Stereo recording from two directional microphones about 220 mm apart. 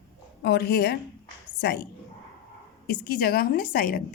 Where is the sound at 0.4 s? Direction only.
45° left (ahead or behind).